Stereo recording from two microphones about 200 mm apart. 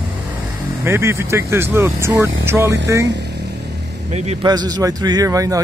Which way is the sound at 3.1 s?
60° right (ahead or behind).